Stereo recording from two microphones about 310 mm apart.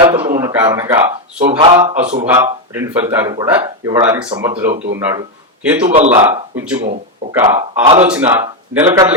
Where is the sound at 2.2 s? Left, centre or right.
Centre.